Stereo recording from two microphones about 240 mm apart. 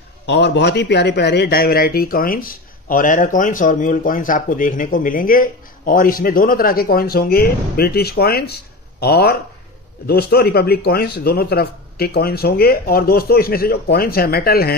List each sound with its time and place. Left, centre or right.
0.3 s a man's voice: left